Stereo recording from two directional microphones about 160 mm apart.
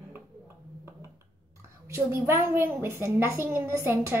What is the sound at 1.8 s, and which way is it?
Speech, 15° right (ahead or behind).